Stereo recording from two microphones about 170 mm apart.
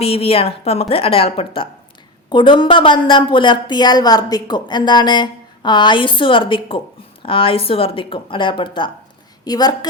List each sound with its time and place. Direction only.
0.0 s a woman's voice: 35° left (ahead or behind)